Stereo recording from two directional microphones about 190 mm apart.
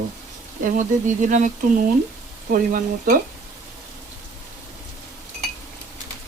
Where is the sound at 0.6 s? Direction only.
45° right (ahead or behind).